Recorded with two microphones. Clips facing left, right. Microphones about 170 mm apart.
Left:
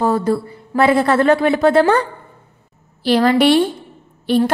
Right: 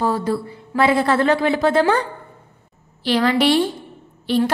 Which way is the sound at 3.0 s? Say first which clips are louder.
Left 4 dB; 40° left (ahead or behind).